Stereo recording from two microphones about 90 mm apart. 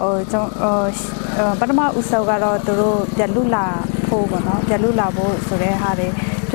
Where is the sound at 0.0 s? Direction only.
20° left (ahead or behind).